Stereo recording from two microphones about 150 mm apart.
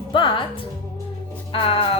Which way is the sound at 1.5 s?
35° left (ahead or behind).